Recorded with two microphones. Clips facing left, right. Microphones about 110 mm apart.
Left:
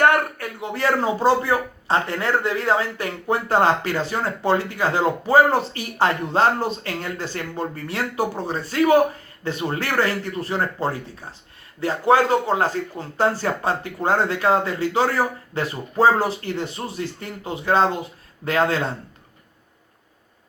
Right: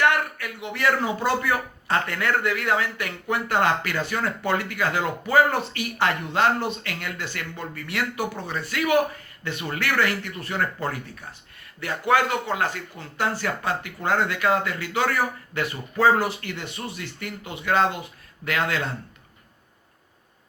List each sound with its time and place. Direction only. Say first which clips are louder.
0.0 s speech: left 4 dB; 40° left (ahead or behind)